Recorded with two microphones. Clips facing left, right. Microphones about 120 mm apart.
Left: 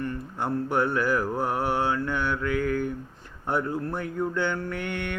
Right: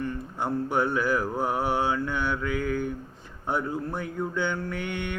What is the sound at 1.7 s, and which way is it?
Mantra, 10° right (ahead or behind).